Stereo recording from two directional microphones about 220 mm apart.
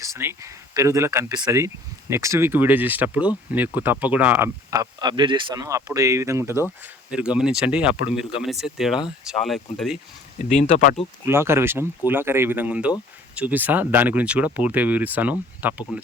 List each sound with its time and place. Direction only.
0.0 s speech: 10° right (ahead or behind)
10.6 s speech: 35° left (ahead or behind)
11.3 s speech: 10° right (ahead or behind)